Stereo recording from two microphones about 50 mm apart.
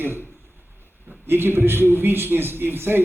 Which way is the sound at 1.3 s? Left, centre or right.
Right.